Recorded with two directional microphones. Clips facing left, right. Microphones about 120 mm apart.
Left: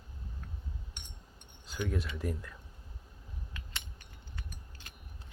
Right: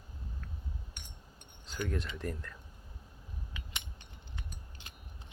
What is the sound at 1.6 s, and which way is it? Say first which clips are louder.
Speech: left 1 dB; 5° left (ahead or behind).